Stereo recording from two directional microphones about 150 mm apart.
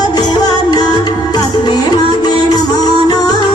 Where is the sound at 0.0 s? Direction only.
30° left (ahead or behind).